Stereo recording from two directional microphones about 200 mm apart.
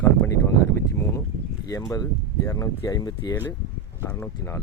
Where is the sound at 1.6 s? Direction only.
15° left (ahead or behind).